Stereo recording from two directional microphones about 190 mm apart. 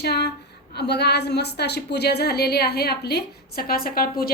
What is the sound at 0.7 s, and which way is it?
A woman's voice, 60° left (ahead or behind).